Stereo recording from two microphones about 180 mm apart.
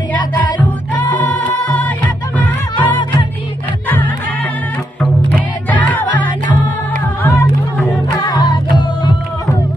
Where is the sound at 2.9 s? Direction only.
25° left (ahead or behind).